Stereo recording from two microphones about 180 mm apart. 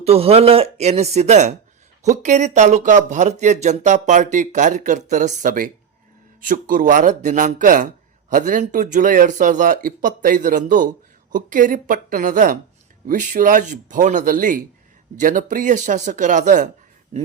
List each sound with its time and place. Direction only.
0.0 s speech: 35° right (ahead or behind)